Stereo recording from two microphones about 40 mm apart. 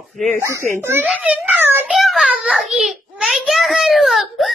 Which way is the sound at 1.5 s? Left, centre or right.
Right.